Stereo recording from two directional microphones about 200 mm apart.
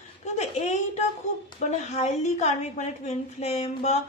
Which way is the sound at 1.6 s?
35° left (ahead or behind).